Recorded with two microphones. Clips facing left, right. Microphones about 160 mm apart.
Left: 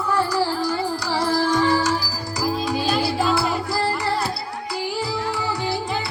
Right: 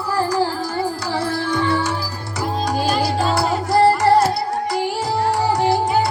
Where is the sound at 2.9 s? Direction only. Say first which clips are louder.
Even; 40° right (ahead or behind).